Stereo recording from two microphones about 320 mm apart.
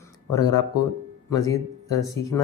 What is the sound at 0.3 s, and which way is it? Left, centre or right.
Speech, centre.